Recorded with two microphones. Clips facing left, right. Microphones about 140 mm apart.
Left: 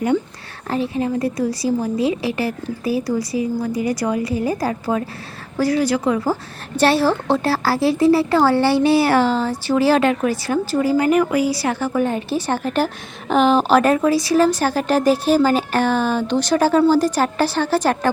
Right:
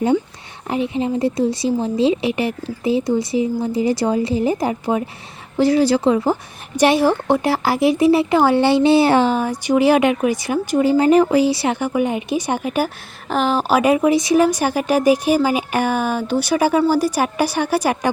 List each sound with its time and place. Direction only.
0.7 s a woman's voice: 20° right (ahead or behind)